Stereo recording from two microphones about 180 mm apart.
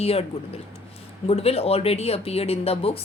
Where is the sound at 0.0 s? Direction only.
35° left (ahead or behind).